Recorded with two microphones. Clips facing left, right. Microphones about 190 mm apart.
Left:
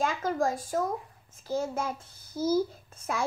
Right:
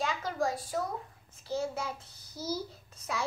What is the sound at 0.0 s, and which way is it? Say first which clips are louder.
A child's voice: left 4 dB; 50° left (ahead or behind).